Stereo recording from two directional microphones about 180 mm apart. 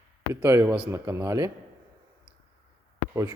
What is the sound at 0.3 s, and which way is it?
Speech, 15° right (ahead or behind).